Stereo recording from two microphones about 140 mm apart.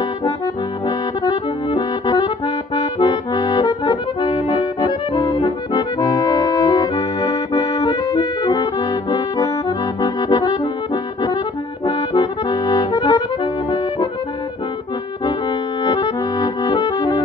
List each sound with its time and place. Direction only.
1.7 s accordion: 30° left (ahead or behind)
11.8 s accordion: 30° left (ahead or behind)
15.8 s accordion: 30° left (ahead or behind)